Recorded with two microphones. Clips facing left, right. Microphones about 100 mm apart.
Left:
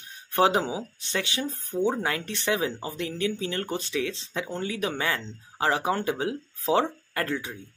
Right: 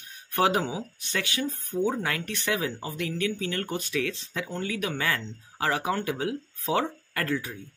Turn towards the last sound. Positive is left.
turn(degrees=25)  # may be behind; listen again after turning